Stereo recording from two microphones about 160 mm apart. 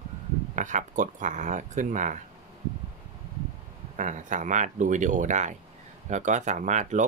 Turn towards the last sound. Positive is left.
turn(degrees=-50)  # may be behind; listen again after turning